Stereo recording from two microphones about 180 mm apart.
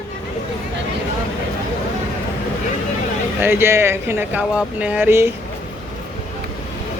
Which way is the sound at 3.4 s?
10° right (ahead or behind).